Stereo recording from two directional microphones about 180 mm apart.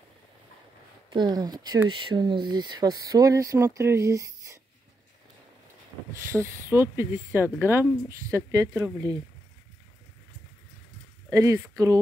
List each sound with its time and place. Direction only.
1.1 s speech: 25° right (ahead or behind)
6.3 s speech: 15° right (ahead or behind)
11.3 s speech: 20° right (ahead or behind)